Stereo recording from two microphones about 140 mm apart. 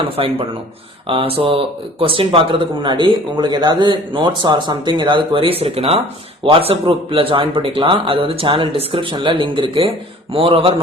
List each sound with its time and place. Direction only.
0.2 s speech: 40° right (ahead or behind)